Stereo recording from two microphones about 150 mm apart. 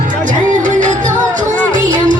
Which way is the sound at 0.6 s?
55° right (ahead or behind).